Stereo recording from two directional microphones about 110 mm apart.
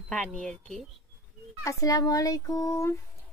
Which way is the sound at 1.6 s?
30° left (ahead or behind).